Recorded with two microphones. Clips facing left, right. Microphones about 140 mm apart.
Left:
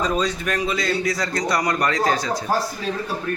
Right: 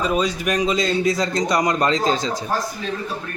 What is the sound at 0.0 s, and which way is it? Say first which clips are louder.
A man's voice: right 2 dB; 10° right (ahead or behind).